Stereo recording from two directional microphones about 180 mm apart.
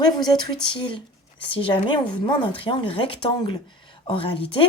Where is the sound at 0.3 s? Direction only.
25° left (ahead or behind).